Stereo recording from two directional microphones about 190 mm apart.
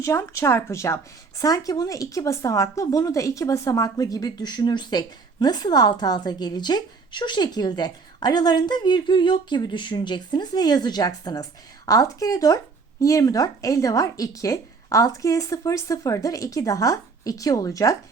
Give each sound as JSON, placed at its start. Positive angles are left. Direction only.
{"t": 0.0, "sound": "speech", "side_deg": 15}